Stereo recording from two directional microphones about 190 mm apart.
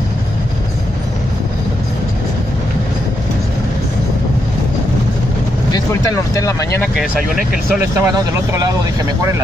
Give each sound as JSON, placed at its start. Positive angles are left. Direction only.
{"t": 5.7, "sound": "speech", "side_deg": 15}
{"t": 7.9, "sound": "speech", "side_deg": -15}